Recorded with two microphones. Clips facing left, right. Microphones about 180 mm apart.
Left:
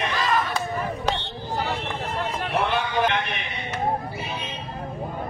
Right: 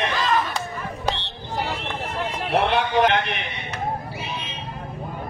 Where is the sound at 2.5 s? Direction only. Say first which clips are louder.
Right 5 dB; 75° right (ahead or behind).